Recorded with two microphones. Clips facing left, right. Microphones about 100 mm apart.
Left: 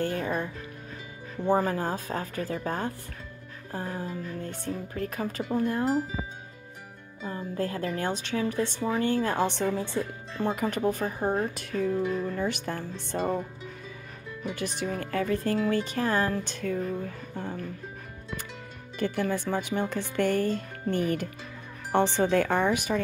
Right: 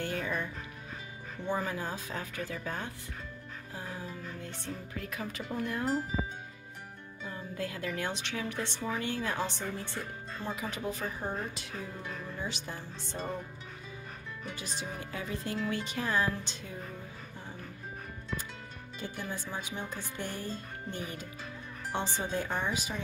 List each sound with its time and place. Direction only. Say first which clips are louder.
0.0 s music: left 5 dB; 40° left (ahead or behind)
1.4 s speech: left 9 dB; 45° left (ahead or behind)
7.2 s speech: left 7 dB; 40° left (ahead or behind)
9.5 s speech: left 10 dB; 90° left
10.4 s speech: left 10 dB; 50° left (ahead or behind)
14.5 s speech: left 9 dB; 60° left (ahead or behind)
18.9 s speech: left 11 dB; 65° left (ahead or behind)